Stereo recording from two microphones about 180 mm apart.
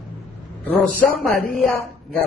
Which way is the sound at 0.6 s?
10° left (ahead or behind).